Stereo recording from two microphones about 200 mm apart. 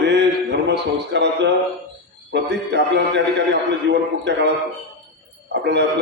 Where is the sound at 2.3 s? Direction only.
60° right (ahead or behind).